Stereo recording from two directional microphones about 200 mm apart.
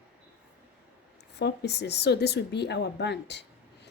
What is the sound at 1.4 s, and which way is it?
A woman's voice, 55° left (ahead or behind).